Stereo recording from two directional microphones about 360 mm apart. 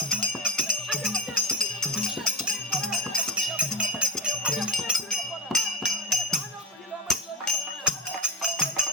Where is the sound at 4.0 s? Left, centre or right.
Centre.